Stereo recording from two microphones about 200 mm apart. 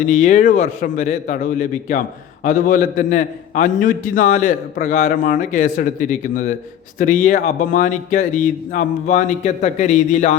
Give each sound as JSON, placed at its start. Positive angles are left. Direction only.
{"t": 0.0, "sound": "a man's voice", "side_deg": 40}